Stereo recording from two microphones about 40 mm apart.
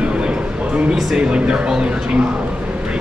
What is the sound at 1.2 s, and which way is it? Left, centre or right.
Speech, right.